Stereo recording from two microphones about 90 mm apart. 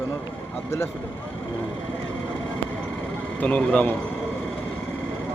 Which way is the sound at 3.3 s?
15° left (ahead or behind).